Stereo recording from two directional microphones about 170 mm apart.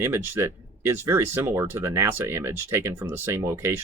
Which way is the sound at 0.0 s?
15° right (ahead or behind).